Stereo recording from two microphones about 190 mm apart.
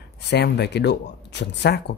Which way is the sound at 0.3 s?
60° left (ahead or behind).